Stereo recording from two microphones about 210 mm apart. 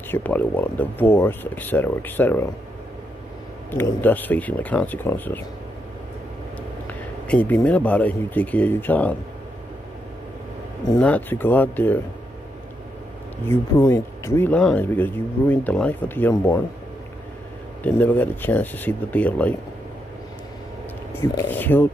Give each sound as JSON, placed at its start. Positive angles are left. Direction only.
{"t": 0.1, "sound": "speech", "side_deg": 10}
{"t": 3.7, "sound": "speech", "side_deg": 10}
{"t": 6.9, "sound": "speech", "side_deg": 5}
{"t": 11.0, "sound": "speech", "side_deg": 5}
{"t": 13.5, "sound": "speech", "side_deg": 15}
{"t": 17.8, "sound": "speech", "side_deg": 10}
{"t": 21.1, "sound": "speech", "side_deg": 10}